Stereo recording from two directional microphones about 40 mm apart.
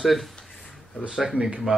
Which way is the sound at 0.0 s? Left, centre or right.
Centre.